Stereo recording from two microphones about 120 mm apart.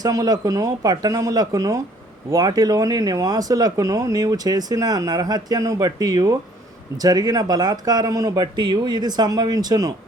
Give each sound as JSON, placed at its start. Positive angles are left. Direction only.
{"t": 0.0, "sound": "speech", "side_deg": -30}